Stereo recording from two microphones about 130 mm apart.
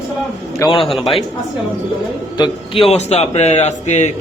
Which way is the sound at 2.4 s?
45° left (ahead or behind).